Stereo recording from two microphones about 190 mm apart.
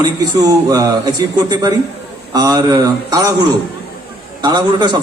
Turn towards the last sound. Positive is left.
turn(degrees=-25)  # may be behind; listen again after turning